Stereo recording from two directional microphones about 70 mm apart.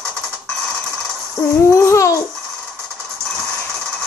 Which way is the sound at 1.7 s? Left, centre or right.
Left.